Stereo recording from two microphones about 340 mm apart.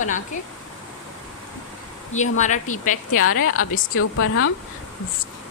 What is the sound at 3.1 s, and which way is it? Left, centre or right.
A woman's voice, left.